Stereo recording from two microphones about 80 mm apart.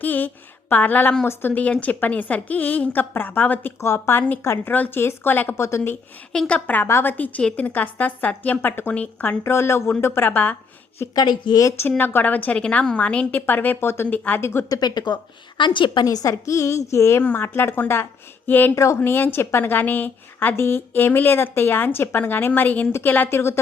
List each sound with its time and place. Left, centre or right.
0.0 s a woman's voice: left
3.8 s a woman's voice: left
4.7 s a woman's voice: left
6.3 s a woman's voice: centre
6.8 s a woman's voice: left
9.4 s a woman's voice: left
11.1 s a woman's voice: left
11.9 s a woman's voice: left
14.7 s a woman's voice: left
16.0 s a woman's voice: left
18.7 s a woman's voice: left